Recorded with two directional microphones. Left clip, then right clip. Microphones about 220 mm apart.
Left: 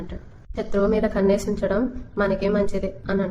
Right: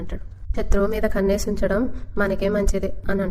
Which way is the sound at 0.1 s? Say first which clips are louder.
Right 3 dB; 40° right (ahead or behind).